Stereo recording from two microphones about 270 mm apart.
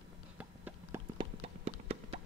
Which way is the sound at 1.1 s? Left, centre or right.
Right.